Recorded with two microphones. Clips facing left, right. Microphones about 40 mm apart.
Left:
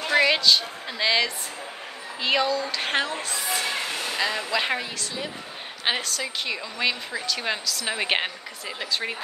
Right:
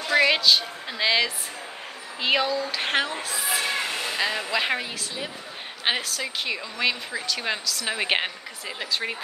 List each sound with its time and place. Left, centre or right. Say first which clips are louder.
0.1 s a woman's voice: even; centre